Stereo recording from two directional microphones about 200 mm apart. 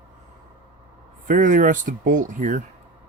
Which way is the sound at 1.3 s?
40° right (ahead or behind).